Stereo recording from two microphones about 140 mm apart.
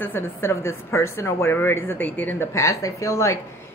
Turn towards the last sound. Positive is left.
turn(degrees=20)  # may be behind; listen again after turning